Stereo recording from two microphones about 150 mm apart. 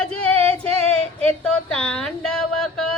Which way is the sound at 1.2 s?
5° left (ahead or behind).